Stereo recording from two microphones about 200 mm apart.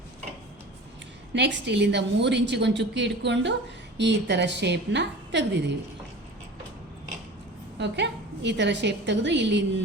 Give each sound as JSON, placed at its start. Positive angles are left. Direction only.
{"t": 1.3, "sound": "a woman's voice", "side_deg": -60}
{"t": 7.8, "sound": "a woman's voice", "side_deg": -60}